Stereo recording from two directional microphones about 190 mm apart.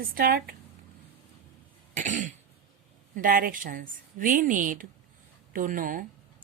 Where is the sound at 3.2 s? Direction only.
45° right (ahead or behind).